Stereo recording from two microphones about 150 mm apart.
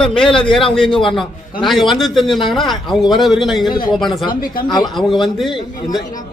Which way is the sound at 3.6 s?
30° left (ahead or behind).